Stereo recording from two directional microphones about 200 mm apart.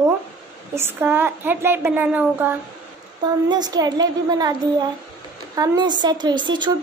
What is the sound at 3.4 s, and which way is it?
A woman's voice, 20° right (ahead or behind).